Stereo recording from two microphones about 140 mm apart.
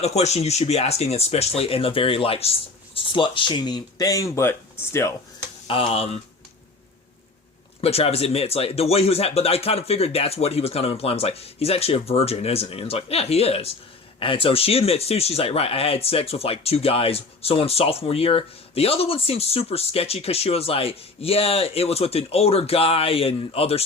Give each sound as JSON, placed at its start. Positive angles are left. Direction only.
{"t": 0.0, "sound": "speech", "side_deg": 50}
{"t": 5.6, "sound": "speech", "side_deg": 40}
{"t": 7.8, "sound": "speech", "side_deg": 45}